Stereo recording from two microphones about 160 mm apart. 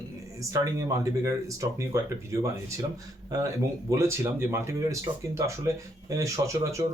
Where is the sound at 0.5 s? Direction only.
20° right (ahead or behind).